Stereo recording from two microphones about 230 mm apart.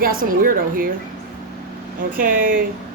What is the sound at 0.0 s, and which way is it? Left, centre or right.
Speech, right.